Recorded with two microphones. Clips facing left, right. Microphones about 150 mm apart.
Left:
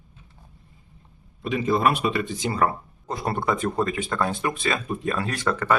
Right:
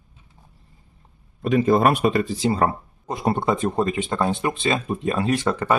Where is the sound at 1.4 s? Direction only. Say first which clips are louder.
Right 6 dB; 45° right (ahead or behind).